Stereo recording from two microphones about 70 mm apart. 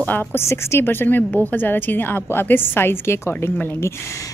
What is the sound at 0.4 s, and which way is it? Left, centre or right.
A woman's voice, left.